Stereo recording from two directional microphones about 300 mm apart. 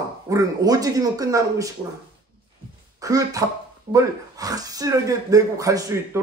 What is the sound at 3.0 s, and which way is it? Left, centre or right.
Speech, centre.